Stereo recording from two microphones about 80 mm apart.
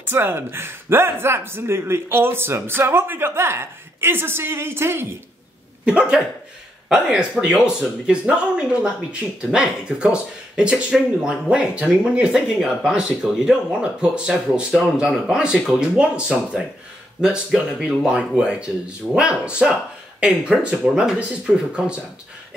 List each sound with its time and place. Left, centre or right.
0.1 s speech: right
5.9 s speech: centre